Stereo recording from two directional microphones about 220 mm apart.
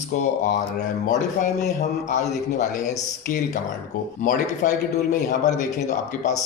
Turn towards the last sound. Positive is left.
turn(degrees=35)  # may be behind; listen again after turning